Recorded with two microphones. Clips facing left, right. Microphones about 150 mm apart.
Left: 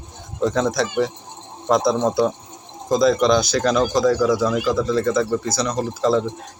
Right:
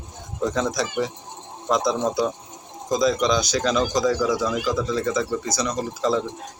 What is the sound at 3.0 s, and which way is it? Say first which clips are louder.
Speech: left 4 dB; 60° left (ahead or behind).